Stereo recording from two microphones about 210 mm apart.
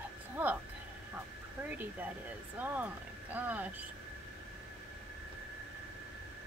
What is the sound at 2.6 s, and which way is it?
Speech, 10° right (ahead or behind).